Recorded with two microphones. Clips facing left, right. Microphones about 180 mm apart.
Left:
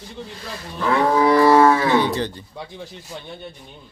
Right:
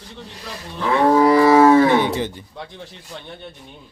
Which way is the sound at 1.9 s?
20° right (ahead or behind).